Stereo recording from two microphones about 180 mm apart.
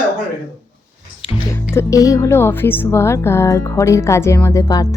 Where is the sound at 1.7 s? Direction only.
20° left (ahead or behind).